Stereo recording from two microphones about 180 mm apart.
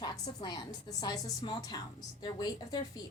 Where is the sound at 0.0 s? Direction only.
25° left (ahead or behind).